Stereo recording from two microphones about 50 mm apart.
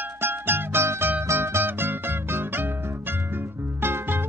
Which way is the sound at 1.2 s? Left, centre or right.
Right.